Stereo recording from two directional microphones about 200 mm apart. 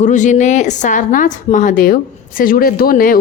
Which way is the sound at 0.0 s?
40° left (ahead or behind).